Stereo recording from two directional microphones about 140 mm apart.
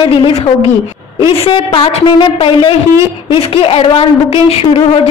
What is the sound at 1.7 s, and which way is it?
A woman's voice, 35° left (ahead or behind).